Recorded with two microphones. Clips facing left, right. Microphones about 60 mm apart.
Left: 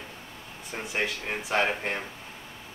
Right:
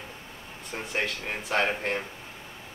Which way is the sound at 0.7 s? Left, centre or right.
Centre.